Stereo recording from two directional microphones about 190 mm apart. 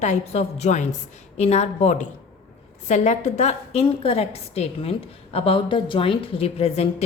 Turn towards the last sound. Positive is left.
turn(degrees=35)  # may be behind; listen again after turning